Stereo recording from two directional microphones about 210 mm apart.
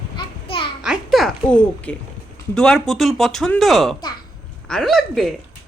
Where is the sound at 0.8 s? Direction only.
Centre (ahead or behind).